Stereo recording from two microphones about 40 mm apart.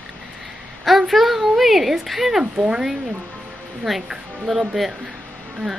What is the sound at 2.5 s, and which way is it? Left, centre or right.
Speech, right.